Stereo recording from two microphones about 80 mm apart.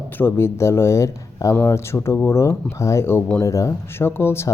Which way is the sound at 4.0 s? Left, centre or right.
Left.